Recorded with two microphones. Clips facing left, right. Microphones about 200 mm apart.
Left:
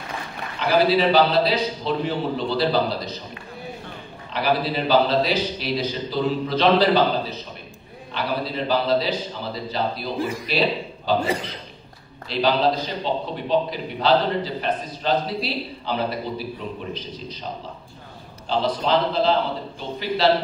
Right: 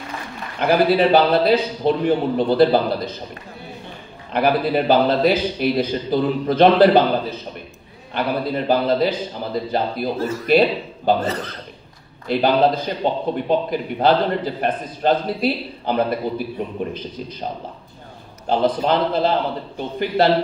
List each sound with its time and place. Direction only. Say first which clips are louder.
0.6 s a man's voice: right 3 dB; 55° right (ahead or behind)
4.3 s a man's voice: right 5 dB; 55° right (ahead or behind)
10.1 s a man's voice: right 9 dB; 15° left (ahead or behind)
12.3 s a man's voice: right 4 dB; 55° right (ahead or behind)
18.5 s a man's voice: right 3 dB; 50° right (ahead or behind)